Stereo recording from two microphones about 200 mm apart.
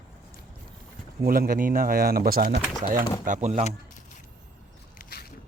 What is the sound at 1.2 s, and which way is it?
Speech, 45° right (ahead or behind).